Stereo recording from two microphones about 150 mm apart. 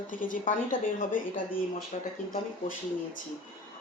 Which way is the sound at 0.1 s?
60° left (ahead or behind).